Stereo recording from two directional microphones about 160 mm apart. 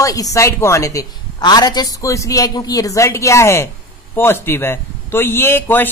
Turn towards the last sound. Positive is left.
turn(degrees=15)  # may be behind; listen again after turning